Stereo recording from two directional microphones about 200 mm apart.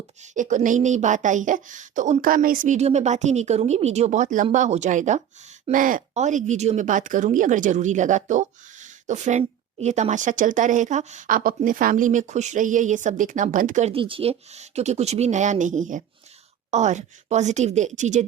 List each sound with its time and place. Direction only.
0.2 s speech: 40° right (ahead or behind)